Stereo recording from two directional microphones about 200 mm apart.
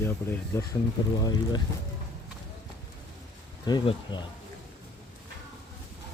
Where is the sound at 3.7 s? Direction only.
20° left (ahead or behind).